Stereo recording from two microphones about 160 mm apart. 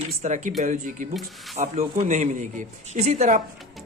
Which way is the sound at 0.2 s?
50° right (ahead or behind).